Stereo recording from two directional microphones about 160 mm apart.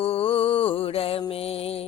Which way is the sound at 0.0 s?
35° left (ahead or behind).